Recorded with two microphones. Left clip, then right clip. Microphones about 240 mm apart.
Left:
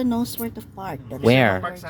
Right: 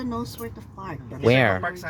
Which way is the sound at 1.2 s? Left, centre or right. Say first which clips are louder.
Left 2 dB; centre.